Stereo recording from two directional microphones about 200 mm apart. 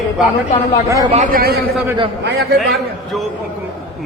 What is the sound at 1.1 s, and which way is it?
Speech, 40° right (ahead or behind).